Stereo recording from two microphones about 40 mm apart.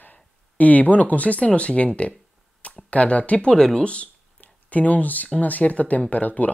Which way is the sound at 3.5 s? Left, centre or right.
Centre.